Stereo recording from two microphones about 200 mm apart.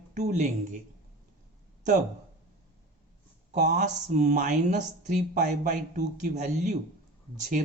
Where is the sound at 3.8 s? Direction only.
35° right (ahead or behind).